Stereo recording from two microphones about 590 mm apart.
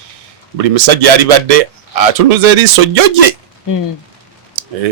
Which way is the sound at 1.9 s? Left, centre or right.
Right.